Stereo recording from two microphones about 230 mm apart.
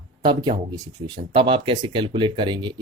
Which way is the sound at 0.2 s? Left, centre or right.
Right.